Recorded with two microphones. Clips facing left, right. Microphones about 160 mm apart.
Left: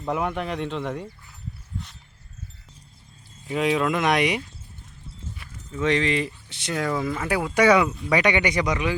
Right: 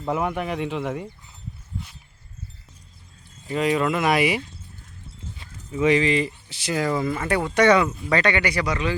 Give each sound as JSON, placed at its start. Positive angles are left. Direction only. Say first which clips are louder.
{"t": 0.0, "sound": "speech", "louder": "right 1 dB", "side_deg": -5}
{"t": 3.4, "sound": "speech", "louder": "right 1 dB", "side_deg": 0}
{"t": 5.7, "sound": "speech", "louder": "right 3 dB", "side_deg": -10}